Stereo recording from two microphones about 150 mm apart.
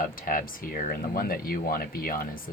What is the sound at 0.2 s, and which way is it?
Speech, 70° left (ahead or behind).